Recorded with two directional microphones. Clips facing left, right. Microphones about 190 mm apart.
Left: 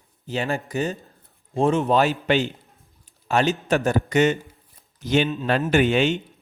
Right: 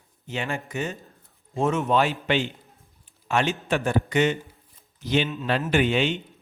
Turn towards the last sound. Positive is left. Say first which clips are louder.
# left 3 dB
turn(degrees=45)  # may be behind; listen again after turning